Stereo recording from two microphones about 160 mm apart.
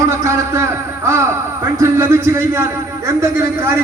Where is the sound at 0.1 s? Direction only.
15° right (ahead or behind).